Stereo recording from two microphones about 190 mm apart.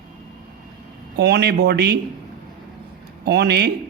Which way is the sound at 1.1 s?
60° right (ahead or behind).